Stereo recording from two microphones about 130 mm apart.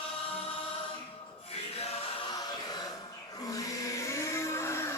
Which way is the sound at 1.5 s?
50° left (ahead or behind).